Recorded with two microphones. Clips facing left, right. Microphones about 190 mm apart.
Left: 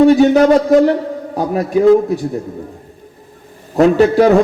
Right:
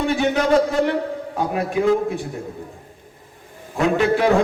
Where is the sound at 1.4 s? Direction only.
35° left (ahead or behind).